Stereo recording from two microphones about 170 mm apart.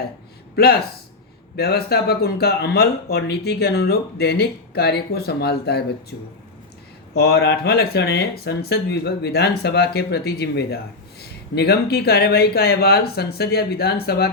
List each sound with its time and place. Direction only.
0.5 s speech: 70° left (ahead or behind)